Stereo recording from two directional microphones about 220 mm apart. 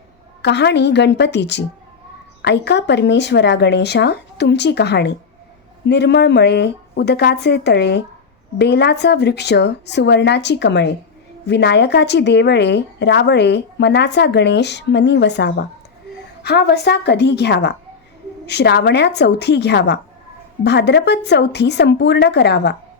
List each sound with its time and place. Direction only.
0.4 s speech: 50° left (ahead or behind)